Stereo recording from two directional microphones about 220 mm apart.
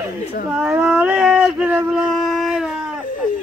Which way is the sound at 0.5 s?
5° right (ahead or behind).